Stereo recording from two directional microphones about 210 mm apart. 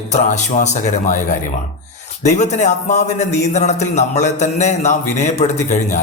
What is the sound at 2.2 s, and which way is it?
A man's voice, 35° left (ahead or behind).